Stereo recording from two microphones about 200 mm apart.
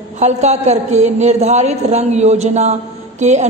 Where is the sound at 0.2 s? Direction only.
35° right (ahead or behind).